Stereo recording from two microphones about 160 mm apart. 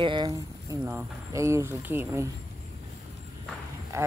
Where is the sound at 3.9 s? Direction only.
20° right (ahead or behind).